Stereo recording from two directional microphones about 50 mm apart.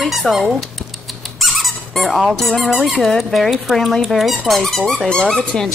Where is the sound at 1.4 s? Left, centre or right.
Centre.